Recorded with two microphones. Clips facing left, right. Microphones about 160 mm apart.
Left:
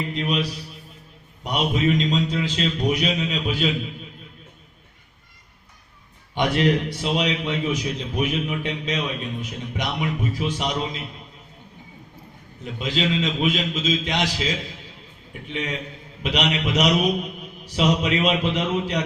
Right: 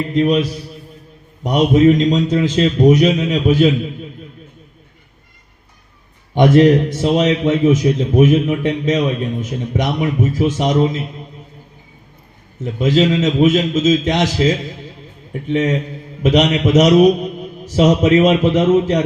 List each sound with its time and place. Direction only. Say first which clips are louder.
0.1 s a man's voice: right 10 dB; 45° right (ahead or behind)
6.3 s a man's voice: right 10 dB; 45° right (ahead or behind)
12.6 s a man's voice: right 10 dB; 45° right (ahead or behind)